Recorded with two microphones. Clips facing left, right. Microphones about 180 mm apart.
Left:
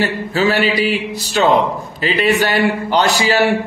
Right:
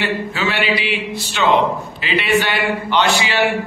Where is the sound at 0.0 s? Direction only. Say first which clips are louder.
Left 4 dB; 40° left (ahead or behind).